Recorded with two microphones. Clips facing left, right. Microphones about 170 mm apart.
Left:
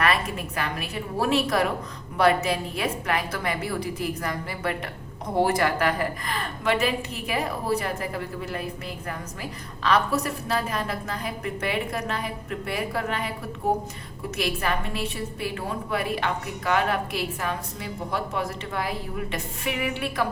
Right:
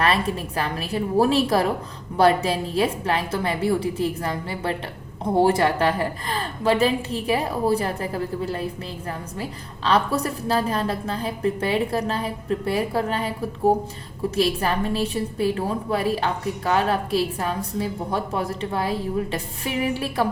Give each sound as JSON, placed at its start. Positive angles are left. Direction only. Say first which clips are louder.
{"t": 0.0, "sound": "a woman's voice", "louder": "right 3 dB", "side_deg": -30}